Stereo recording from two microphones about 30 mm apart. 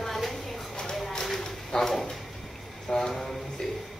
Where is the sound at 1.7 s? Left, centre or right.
Centre.